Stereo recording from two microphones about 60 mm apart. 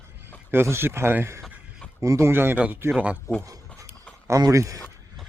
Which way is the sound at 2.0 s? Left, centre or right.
Right.